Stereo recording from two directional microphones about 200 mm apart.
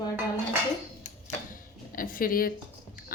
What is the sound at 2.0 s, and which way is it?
Speech, 45° left (ahead or behind).